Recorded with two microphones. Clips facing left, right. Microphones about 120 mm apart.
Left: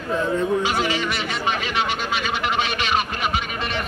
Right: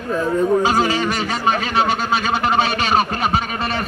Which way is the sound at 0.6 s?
40° right (ahead or behind).